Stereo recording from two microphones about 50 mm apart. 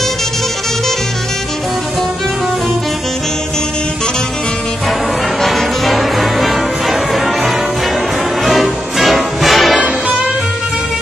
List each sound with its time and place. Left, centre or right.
5.4 s music: centre